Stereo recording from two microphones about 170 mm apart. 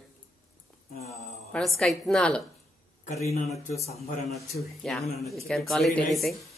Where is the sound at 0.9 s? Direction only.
40° left (ahead or behind).